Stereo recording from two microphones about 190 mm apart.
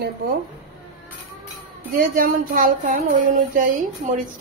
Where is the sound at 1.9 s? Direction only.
45° right (ahead or behind).